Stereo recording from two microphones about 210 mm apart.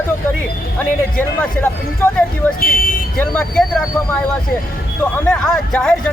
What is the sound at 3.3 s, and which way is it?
Speech, 5° left (ahead or behind).